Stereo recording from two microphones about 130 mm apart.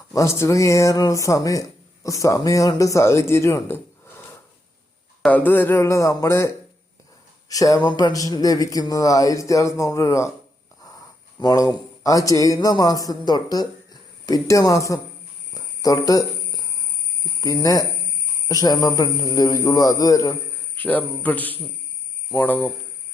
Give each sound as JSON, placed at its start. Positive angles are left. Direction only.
{"t": 0.1, "sound": "speech", "side_deg": 25}
{"t": 5.2, "sound": "speech", "side_deg": 15}
{"t": 7.5, "sound": "speech", "side_deg": 25}
{"t": 11.3, "sound": "speech", "side_deg": 30}
{"t": 15.5, "sound": "a sound", "side_deg": 30}
{"t": 17.4, "sound": "speech", "side_deg": 25}
{"t": 20.7, "sound": "speech", "side_deg": 15}